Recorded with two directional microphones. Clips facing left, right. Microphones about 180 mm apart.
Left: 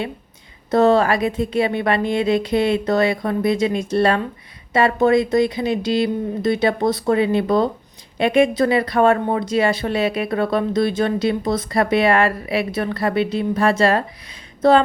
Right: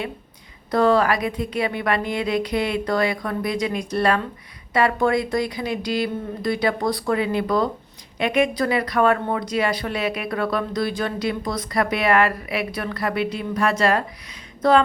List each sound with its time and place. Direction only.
0.7 s speech: 25° left (ahead or behind)